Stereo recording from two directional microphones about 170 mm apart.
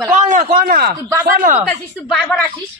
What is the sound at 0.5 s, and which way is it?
A man's voice, 60° right (ahead or behind).